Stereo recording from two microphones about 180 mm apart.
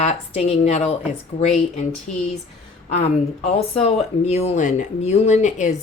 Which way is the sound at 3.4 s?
35° left (ahead or behind).